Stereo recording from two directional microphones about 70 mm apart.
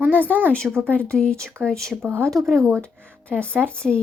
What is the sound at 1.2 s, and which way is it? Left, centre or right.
A woman's voice, centre.